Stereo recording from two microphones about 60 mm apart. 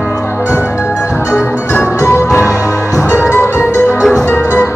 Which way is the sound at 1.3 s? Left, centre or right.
Left.